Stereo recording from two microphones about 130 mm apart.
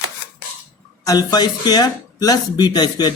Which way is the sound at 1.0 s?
30° left (ahead or behind).